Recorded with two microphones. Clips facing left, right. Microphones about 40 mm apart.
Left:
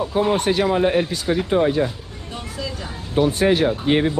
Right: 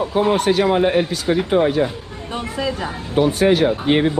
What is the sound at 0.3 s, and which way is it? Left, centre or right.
Speech, right.